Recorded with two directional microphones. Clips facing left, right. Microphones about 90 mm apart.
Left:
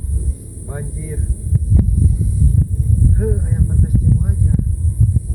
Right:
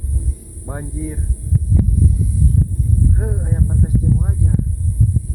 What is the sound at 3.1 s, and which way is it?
Speech, 20° right (ahead or behind).